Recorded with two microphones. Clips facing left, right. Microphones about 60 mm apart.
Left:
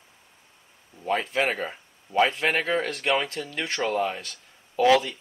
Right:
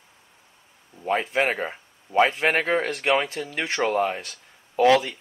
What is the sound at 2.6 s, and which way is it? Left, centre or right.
Speech, right.